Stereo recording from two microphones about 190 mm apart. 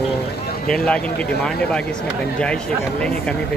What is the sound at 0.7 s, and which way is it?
Speech, 5° left (ahead or behind).